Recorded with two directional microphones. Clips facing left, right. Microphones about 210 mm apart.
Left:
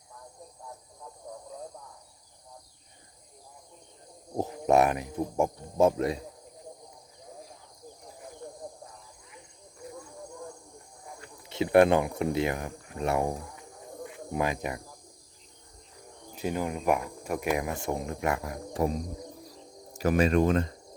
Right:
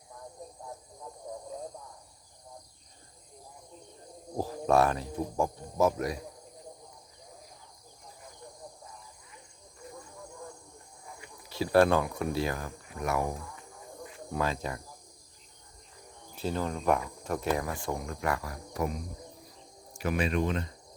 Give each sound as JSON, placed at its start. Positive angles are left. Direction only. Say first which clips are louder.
{"t": 1.2, "sound": "frog", "louder": "right 2 dB", "side_deg": -10}
{"t": 4.4, "sound": "speech", "louder": "left 2 dB", "side_deg": 20}
{"t": 11.4, "sound": "speech", "louder": "left 3 dB", "side_deg": 20}
{"t": 14.3, "sound": "cricket", "louder": "left 2 dB", "side_deg": 20}
{"t": 16.3, "sound": "speech", "louder": "left 2 dB", "side_deg": 15}
{"t": 19.9, "sound": "speech", "louder": "left 6 dB", "side_deg": 40}